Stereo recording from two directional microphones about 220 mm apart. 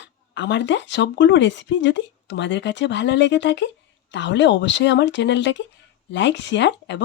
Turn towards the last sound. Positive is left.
turn(degrees=50)  # may be behind; listen again after turning